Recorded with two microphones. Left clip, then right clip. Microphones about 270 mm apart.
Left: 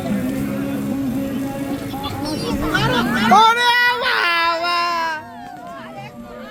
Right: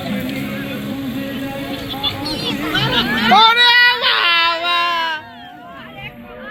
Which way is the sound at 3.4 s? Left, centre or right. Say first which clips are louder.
Right 4 dB; centre.